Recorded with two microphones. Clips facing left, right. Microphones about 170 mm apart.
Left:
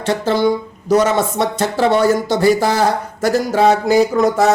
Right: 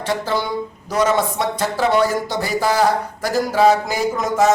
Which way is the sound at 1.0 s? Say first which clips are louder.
Left 2 dB; 70° left (ahead or behind).